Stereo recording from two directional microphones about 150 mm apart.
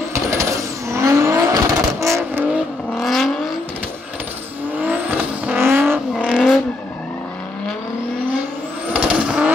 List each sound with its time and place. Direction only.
0.1 s vehicle: 20° right (ahead or behind)
3.0 s vehicle: centre (ahead or behind)
4.8 s vehicle: 10° right (ahead or behind)
6.1 s vehicle: centre (ahead or behind)
8.9 s vehicle: 5° right (ahead or behind)